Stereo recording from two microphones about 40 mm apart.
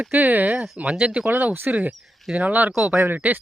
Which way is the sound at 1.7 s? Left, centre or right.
Right.